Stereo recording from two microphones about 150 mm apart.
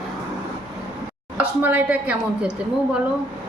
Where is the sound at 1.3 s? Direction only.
10° right (ahead or behind).